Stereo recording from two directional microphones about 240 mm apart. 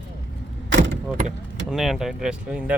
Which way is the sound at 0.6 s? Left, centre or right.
Right.